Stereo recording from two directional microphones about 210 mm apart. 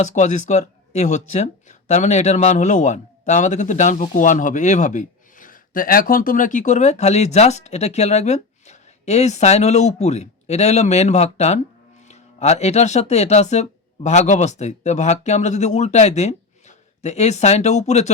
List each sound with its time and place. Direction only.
0.0 s speech: 35° left (ahead or behind)